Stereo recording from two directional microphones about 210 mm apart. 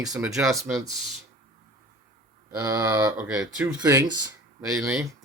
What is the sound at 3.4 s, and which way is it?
Speech, 5° right (ahead or behind).